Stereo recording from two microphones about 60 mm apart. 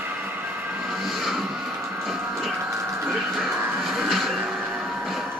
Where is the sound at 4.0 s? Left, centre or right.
Centre.